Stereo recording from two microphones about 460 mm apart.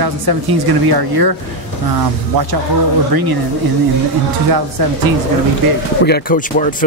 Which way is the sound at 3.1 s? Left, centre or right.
Right.